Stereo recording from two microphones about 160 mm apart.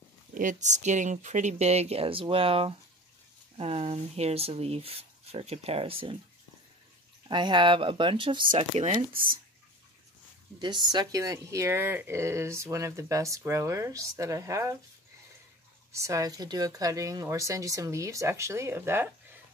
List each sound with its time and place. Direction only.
0.3 s speech: 55° right (ahead or behind); by 6.1 s 35° right (ahead or behind)
7.2 s speech: 30° right (ahead or behind)
9.1 s speech: 65° right (ahead or behind)
10.6 s speech: 30° right (ahead or behind)
15.9 s speech: 20° right (ahead or behind)